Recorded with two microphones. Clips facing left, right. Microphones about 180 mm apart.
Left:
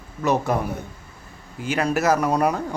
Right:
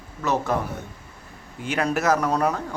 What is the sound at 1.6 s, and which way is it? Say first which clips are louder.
Speech: left 2 dB; centre (ahead or behind).